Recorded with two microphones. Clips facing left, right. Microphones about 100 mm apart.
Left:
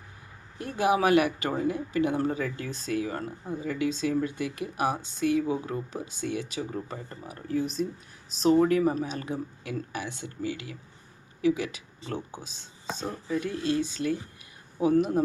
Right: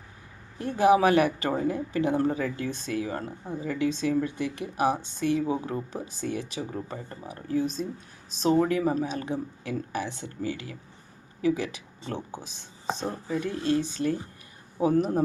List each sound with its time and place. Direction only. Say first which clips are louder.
0.6 s speech: right 4 dB; 30° right (ahead or behind)